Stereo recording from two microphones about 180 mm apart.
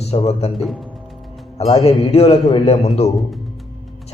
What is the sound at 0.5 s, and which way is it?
Speech, centre (ahead or behind).